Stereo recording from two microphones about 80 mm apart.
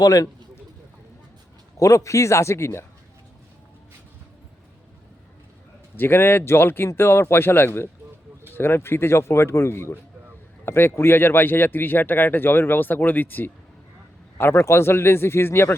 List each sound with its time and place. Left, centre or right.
0.0 s speech: left
1.8 s a man's voice: left
6.0 s a man's voice: left